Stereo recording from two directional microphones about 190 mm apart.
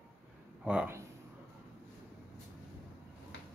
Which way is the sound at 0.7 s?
5° right (ahead or behind).